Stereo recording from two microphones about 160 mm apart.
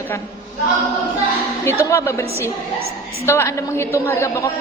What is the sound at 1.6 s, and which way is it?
A woman's voice, 15° left (ahead or behind).